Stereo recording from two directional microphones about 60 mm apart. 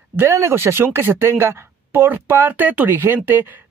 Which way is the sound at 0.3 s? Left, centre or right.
Right.